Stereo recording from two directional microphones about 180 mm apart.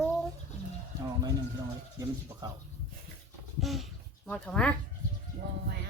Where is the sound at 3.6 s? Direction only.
Centre (ahead or behind).